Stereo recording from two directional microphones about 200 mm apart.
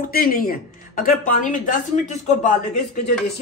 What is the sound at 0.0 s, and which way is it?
Speech, 45° left (ahead or behind).